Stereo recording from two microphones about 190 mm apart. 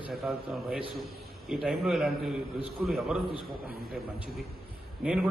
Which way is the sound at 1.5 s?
Centre (ahead or behind).